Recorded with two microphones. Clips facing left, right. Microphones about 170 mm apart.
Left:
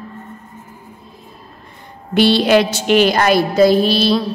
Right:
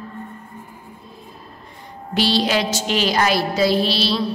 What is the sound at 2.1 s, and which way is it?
A woman's voice, 60° left (ahead or behind).